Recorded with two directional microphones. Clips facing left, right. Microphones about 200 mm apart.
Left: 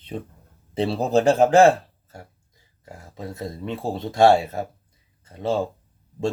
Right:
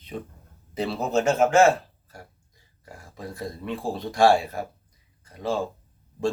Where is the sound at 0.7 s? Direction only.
30° left (ahead or behind).